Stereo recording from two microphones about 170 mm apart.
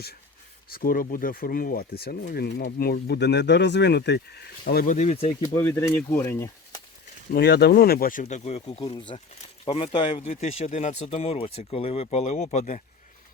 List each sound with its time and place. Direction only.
0.7 s speech: 55° left (ahead or behind); by 4.4 s 80° left
4.6 s speech: 55° left (ahead or behind)
4.9 s speech: 35° left (ahead or behind)
5.5 s speech: 10° left (ahead or behind)
7.3 s speech: 75° left (ahead or behind); by 8.2 s 60° left (ahead or behind)
8.2 s speech: 40° left (ahead or behind)